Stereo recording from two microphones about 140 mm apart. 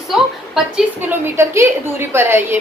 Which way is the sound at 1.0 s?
15° right (ahead or behind).